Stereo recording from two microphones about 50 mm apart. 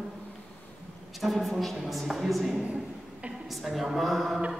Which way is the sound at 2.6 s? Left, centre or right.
Right.